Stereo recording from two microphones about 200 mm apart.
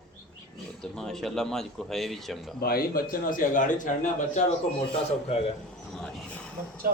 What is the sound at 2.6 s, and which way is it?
A man's voice, 50° left (ahead or behind).